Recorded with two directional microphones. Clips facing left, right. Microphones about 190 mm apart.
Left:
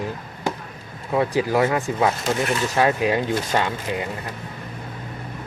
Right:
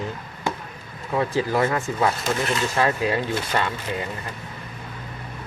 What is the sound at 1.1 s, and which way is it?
Speech, 15° left (ahead or behind).